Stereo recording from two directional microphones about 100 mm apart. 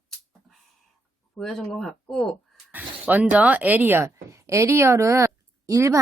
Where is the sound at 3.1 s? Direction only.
15° right (ahead or behind); by 6.0 s 30° right (ahead or behind).